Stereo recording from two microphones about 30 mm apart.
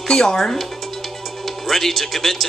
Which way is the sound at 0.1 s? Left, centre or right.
Left.